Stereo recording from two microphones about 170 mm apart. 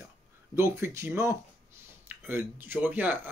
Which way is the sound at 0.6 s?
15° right (ahead or behind).